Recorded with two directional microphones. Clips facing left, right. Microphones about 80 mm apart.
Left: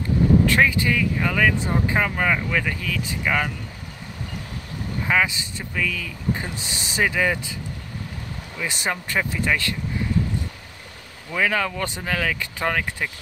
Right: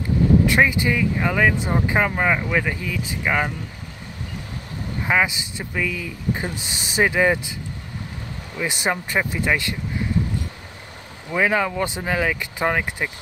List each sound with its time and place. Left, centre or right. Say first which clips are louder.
0.5 s speech: right 1 dB; centre
5.0 s speech: right 1 dB; centre
8.5 s speech: right 3 dB; centre
11.2 s speech: right 3 dB; centre